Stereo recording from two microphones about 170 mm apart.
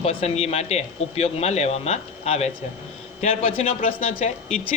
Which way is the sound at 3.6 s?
40° left (ahead or behind).